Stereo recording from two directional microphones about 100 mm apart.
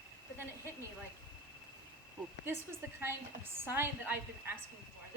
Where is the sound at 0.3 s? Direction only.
25° right (ahead or behind).